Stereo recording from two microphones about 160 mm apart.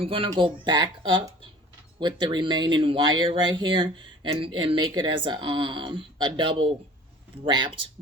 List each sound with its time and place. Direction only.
0.0 s speech: 35° right (ahead or behind)